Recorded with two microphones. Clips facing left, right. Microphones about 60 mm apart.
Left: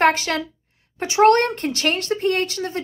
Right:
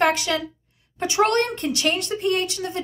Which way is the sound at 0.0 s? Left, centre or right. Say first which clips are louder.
Left 3 dB; left.